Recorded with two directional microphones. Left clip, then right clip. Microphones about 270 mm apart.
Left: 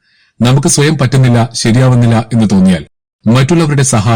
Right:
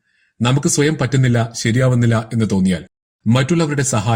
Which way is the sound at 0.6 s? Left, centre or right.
Centre.